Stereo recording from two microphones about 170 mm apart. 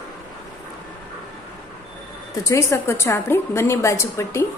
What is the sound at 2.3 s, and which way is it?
A woman's voice, 15° left (ahead or behind).